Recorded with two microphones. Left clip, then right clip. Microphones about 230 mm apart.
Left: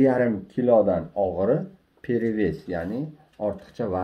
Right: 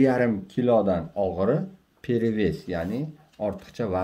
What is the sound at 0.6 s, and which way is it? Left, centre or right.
Speech, right.